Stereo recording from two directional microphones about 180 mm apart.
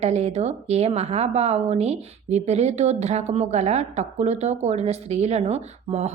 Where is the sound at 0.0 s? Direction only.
35° right (ahead or behind).